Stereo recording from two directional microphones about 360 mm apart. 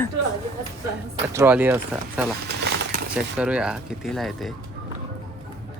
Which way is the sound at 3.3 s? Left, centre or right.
Centre.